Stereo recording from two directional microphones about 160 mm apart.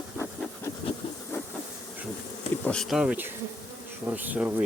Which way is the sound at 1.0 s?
35° left (ahead or behind).